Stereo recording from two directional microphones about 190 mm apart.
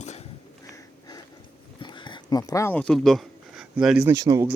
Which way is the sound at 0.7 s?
20° left (ahead or behind).